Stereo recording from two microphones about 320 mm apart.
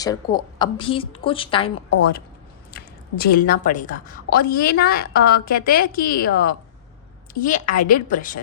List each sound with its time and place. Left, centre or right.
0.0 s a woman's voice: centre
2.7 s a woman's voice: left